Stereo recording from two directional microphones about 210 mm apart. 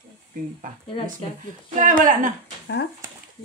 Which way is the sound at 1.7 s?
40° right (ahead or behind).